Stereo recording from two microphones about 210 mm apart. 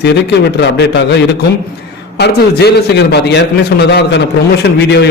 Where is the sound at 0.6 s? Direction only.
55° left (ahead or behind).